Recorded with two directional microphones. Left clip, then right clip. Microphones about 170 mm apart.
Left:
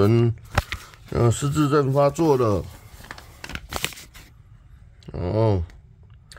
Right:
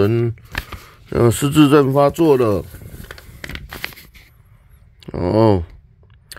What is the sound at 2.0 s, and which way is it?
Speech, 15° right (ahead or behind).